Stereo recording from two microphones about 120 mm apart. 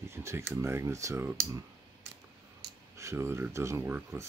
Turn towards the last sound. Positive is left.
turn(degrees=-15)  # may be behind; listen again after turning